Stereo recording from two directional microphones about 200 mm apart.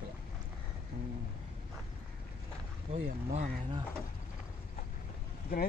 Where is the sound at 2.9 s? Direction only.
30° right (ahead or behind).